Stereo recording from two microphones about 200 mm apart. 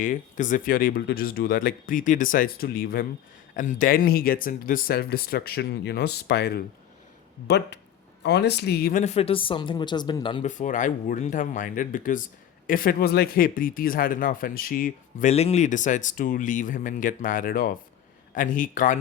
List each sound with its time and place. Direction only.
0.0 s speech: 40° left (ahead or behind); by 10.4 s 25° left (ahead or behind)
10.4 s speech: 40° left (ahead or behind)